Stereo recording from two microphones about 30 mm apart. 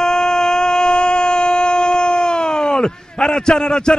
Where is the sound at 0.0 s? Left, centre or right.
Left.